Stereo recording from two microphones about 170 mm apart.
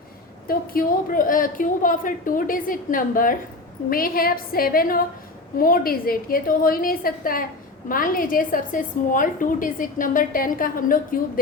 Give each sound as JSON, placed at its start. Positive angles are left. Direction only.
{"t": 0.4, "sound": "a woman's voice", "side_deg": 60}